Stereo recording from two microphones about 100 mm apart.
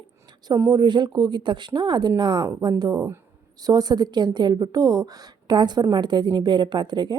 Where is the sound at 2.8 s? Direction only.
35° right (ahead or behind).